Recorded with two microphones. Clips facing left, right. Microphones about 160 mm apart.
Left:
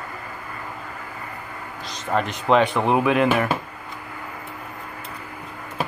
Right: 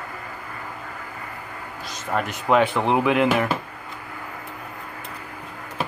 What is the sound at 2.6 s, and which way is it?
Speech, 15° left (ahead or behind).